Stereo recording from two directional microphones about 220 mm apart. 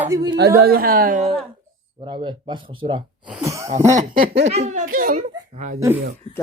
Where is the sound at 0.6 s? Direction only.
40° right (ahead or behind).